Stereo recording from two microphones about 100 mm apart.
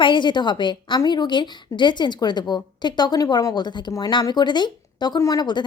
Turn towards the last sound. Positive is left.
turn(degrees=45)  # may be behind; listen again after turning